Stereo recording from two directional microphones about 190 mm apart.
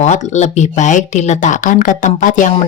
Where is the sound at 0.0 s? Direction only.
40° left (ahead or behind).